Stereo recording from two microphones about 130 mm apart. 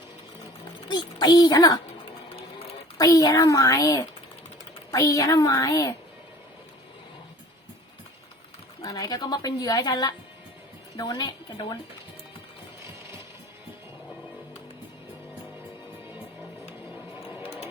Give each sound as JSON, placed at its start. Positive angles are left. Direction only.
{"t": 0.9, "sound": "a woman's voice", "side_deg": 35}
{"t": 3.0, "sound": "a child's voice", "side_deg": 30}
{"t": 8.8, "sound": "a woman's voice", "side_deg": 30}
{"t": 17.2, "sound": "a sound", "side_deg": -10}